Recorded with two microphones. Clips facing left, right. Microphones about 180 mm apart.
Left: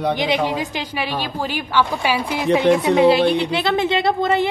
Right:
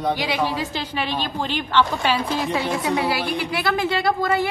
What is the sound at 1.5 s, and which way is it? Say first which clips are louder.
A woman's voice: even; 10° left (ahead or behind).